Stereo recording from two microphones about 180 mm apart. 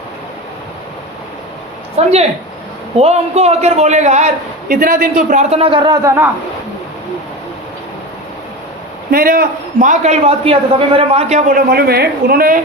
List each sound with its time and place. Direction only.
2.0 s a man's voice: 35° right (ahead or behind)
4.7 s a man's voice: 55° right (ahead or behind); by 6.2 s 15° right (ahead or behind)
9.1 s a man's voice: 55° right (ahead or behind)